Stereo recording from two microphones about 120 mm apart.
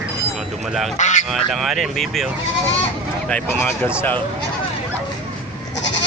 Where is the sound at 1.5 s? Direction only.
Centre (ahead or behind).